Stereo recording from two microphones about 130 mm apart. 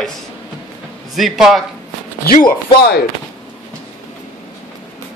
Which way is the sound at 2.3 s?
90° left.